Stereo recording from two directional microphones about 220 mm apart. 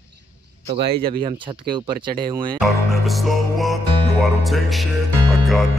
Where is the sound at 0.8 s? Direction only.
45° right (ahead or behind).